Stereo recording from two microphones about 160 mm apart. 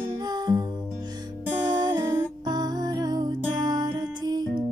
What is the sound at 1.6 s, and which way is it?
Music, 25° right (ahead or behind).